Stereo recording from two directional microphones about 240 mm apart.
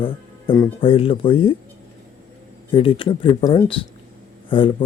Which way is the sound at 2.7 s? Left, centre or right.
Left.